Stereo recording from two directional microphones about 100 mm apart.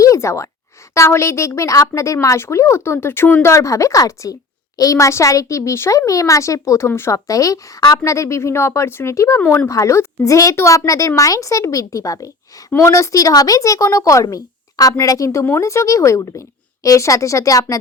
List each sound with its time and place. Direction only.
0.0 s a sound: 30° left (ahead or behind)
0.9 s speech: 30° left (ahead or behind)
7.3 s speech: 35° left (ahead or behind)
9.4 s speech: 20° left (ahead or behind)
9.6 s speech: 30° left (ahead or behind)